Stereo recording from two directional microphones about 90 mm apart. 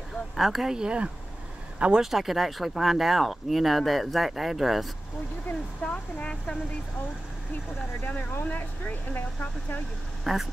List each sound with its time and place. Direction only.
0.4 s speech: centre (ahead or behind)
5.8 s speech: 15° left (ahead or behind)
8.0 s speech: 20° left (ahead or behind)
10.2 s speech: centre (ahead or behind)